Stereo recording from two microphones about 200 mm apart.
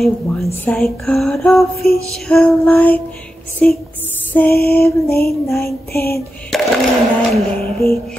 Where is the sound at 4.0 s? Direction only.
10° left (ahead or behind).